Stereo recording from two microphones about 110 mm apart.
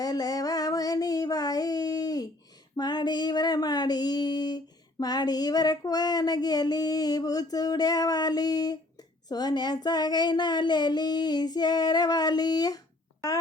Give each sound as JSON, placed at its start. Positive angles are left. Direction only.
{"t": 0.0, "sound": "child singing", "side_deg": 35}
{"t": 2.7, "sound": "speech", "side_deg": 40}